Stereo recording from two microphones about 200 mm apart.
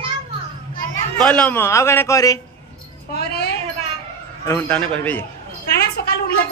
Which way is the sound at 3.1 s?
50° left (ahead or behind).